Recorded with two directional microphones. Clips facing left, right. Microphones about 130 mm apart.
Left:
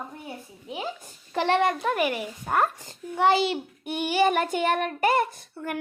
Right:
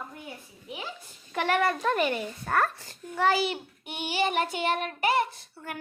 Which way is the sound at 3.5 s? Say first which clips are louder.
Left 6 dB; 45° left (ahead or behind).